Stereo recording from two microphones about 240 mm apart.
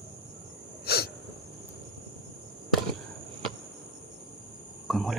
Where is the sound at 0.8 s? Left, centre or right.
Left.